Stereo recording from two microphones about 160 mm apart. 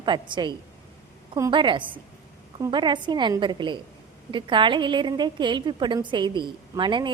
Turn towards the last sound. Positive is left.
turn(degrees=-30)  # may be behind; listen again after turning